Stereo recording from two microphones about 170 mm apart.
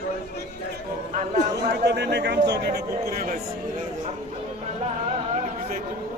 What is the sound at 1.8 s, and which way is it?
A man's voice, 80° right.